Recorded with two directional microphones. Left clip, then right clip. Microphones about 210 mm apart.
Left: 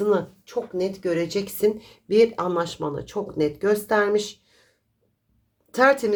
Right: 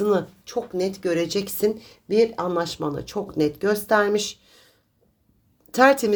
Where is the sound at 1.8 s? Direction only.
10° right (ahead or behind).